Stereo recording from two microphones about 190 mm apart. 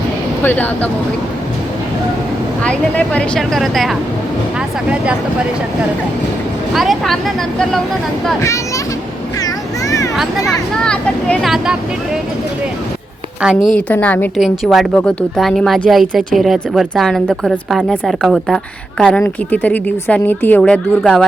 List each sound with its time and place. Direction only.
0.4 s speech: 10° left (ahead or behind)
2.6 s a woman's voice: 5° left (ahead or behind)
6.7 s a woman's voice: centre (ahead or behind)
9.4 s a sound: 15° left (ahead or behind)
10.8 s a woman's voice: 5° left (ahead or behind)
13.4 s a woman's voice: 5° right (ahead or behind)